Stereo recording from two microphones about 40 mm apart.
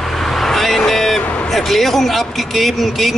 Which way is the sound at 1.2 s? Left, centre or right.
Left.